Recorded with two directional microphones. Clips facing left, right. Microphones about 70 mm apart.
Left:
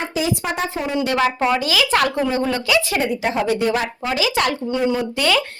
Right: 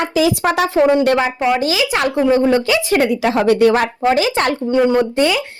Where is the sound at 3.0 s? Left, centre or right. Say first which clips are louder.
Right 6 dB; right.